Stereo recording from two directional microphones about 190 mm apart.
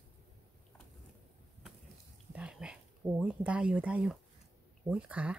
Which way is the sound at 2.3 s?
5° right (ahead or behind).